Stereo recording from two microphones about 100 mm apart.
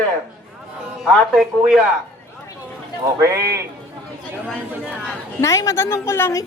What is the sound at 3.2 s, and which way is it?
Speech, 30° right (ahead or behind).